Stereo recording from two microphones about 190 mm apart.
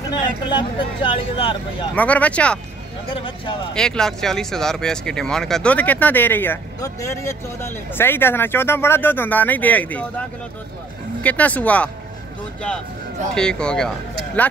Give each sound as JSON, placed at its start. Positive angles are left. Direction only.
{"t": 0.1, "sound": "speech", "side_deg": 25}
{"t": 2.0, "sound": "speech", "side_deg": 10}
{"t": 3.7, "sound": "speech", "side_deg": 5}
{"t": 11.2, "sound": "speech", "side_deg": 10}
{"t": 13.3, "sound": "speech", "side_deg": 5}